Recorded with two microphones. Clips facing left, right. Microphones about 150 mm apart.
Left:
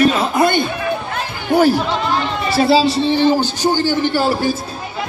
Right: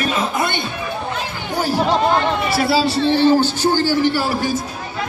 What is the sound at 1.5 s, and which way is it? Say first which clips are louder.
Speech: left 10 dB; 60° left (ahead or behind).